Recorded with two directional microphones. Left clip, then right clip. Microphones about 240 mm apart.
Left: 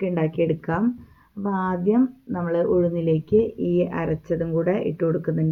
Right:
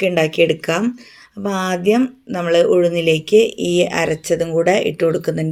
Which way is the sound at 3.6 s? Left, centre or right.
Right.